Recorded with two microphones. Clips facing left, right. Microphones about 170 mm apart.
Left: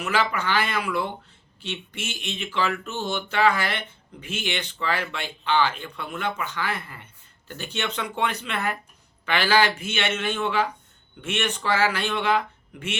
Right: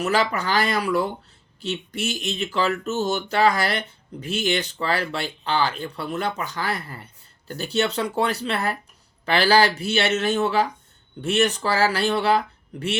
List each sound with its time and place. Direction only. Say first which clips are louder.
0.0 s speech: right 3 dB; 40° right (ahead or behind)